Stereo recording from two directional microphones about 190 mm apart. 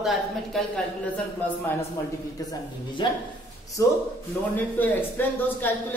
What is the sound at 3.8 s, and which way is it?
Speech, 15° left (ahead or behind).